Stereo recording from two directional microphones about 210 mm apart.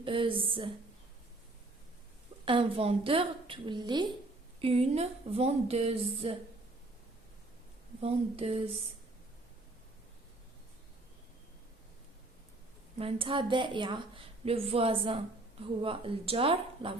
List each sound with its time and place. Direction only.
0.0 s a woman's voice: 25° right (ahead or behind)
2.4 s a woman's voice: 25° right (ahead or behind)
8.0 s a woman's voice: 30° right (ahead or behind)
13.0 s a woman's voice: 25° right (ahead or behind)